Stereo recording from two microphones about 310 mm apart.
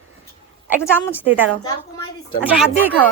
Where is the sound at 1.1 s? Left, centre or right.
Centre.